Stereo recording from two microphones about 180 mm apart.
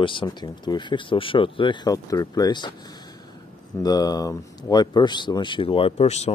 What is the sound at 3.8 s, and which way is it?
Speech, 20° left (ahead or behind).